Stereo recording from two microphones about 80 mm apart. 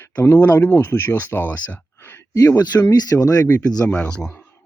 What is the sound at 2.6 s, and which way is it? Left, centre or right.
Speech, left.